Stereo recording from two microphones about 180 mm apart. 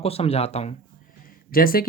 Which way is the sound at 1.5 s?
55° left (ahead or behind).